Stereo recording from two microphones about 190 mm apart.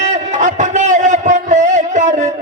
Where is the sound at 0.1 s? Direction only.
40° right (ahead or behind).